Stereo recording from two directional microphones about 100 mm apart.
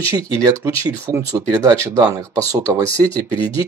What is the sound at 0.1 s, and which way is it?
Speech, 30° right (ahead or behind).